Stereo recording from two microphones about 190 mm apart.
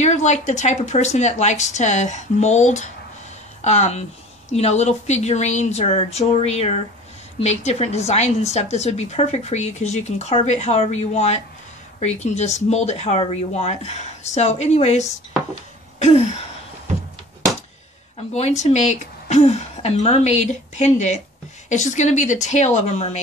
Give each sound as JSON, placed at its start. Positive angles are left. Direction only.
{"t": 0.0, "sound": "a woman's voice", "side_deg": 40}
{"t": 18.3, "sound": "a woman's voice", "side_deg": 35}